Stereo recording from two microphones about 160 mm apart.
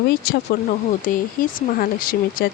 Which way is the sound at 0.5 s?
90° left.